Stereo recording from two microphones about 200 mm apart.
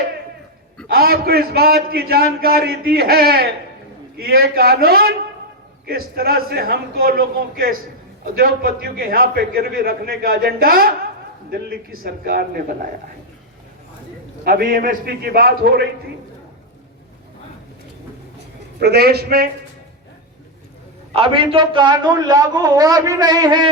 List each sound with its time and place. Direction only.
0.9 s a man's voice: 50° right (ahead or behind)
14.4 s a man's voice: 45° right (ahead or behind)
18.8 s a man's voice: 50° right (ahead or behind)
21.1 s a man's voice: 25° right (ahead or behind)